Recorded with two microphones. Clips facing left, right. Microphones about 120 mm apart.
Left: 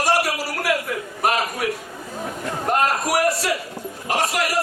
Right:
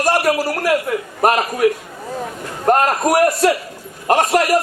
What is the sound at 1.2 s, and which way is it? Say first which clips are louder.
Speech: right 6 dB; 50° right (ahead or behind).